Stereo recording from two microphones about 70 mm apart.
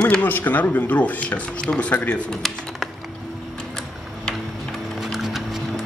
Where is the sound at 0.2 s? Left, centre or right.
Left.